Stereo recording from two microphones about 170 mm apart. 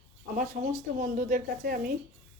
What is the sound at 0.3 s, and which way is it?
Speech, 50° right (ahead or behind).